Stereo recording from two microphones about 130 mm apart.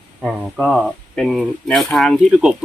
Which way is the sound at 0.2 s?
5° right (ahead or behind).